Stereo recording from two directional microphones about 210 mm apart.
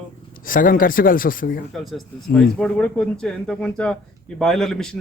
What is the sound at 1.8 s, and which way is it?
A man's voice, centre (ahead or behind).